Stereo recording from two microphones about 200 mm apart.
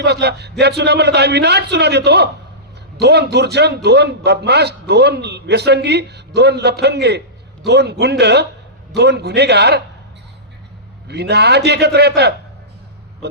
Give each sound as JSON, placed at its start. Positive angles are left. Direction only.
{"t": 0.0, "sound": "a man's voice", "side_deg": -55}
{"t": 11.1, "sound": "a man's voice", "side_deg": -55}